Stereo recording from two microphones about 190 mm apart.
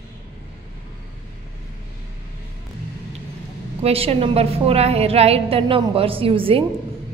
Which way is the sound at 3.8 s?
30° right (ahead or behind).